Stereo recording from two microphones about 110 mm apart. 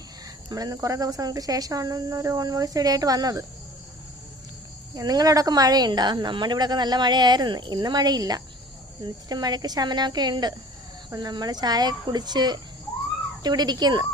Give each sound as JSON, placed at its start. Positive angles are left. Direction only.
{"t": 0.4, "sound": "a woman's voice", "side_deg": -35}
{"t": 4.9, "sound": "a woman's voice", "side_deg": -35}